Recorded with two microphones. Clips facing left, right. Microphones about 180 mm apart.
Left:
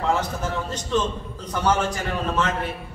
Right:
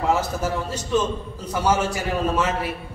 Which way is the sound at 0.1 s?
5° right (ahead or behind).